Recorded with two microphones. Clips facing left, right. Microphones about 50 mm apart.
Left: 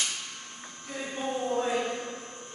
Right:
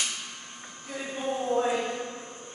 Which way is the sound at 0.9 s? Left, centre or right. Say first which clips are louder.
Right 1 dB; centre.